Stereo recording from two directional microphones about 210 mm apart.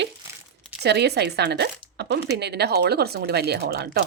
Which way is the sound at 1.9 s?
55° right (ahead or behind).